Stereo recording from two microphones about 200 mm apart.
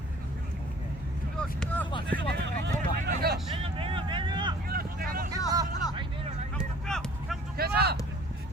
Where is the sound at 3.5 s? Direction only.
25° right (ahead or behind).